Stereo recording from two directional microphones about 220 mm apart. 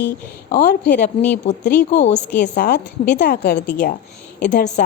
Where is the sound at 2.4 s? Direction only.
45° left (ahead or behind).